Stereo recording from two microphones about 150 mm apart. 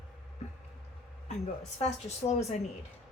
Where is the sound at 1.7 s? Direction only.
45° left (ahead or behind).